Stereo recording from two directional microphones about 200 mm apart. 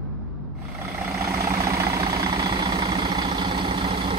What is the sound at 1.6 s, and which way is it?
Vehicle, 15° right (ahead or behind).